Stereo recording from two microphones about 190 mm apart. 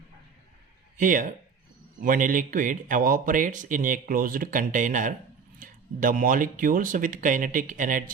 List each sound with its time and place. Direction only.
0.9 s speech: 45° right (ahead or behind)